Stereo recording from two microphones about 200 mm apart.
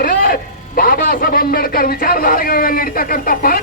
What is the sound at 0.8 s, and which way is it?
Speech, 45° left (ahead or behind).